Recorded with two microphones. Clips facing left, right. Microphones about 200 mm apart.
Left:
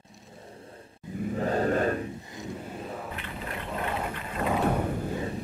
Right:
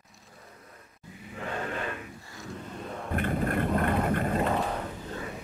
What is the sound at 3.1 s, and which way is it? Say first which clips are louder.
Vehicle: right 9 dB; 50° right (ahead or behind).